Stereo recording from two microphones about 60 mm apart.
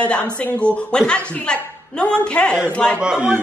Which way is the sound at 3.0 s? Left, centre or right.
Centre.